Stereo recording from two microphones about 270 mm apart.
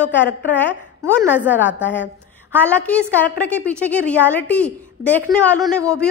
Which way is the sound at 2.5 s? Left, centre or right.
Centre.